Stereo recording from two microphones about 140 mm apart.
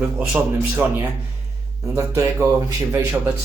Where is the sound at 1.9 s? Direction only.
20° right (ahead or behind).